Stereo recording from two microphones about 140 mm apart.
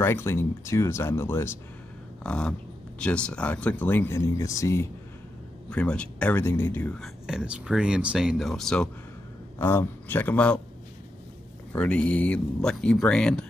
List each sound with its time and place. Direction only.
0.0 s speech: 20° left (ahead or behind)
2.2 s speech: 5° left (ahead or behind); by 4.8 s 20° left (ahead or behind)
5.7 s speech: 5° left (ahead or behind)
7.0 s speech: 5° right (ahead or behind)
9.6 s speech: 15° left (ahead or behind)
11.7 s speech: 10° left (ahead or behind)